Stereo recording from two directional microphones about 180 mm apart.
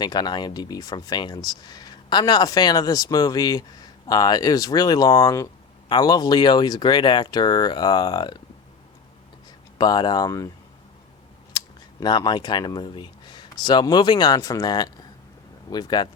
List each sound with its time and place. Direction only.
0.0 s speech: 20° left (ahead or behind)
9.7 s speech: 25° left (ahead or behind)
11.5 s speech: 20° left (ahead or behind)